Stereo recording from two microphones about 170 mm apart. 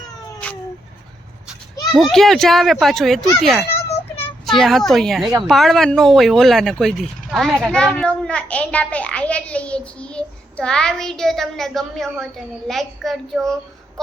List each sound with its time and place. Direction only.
1.9 s a child's voice: centre (ahead or behind)